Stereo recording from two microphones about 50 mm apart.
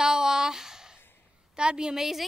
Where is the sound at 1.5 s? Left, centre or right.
Centre.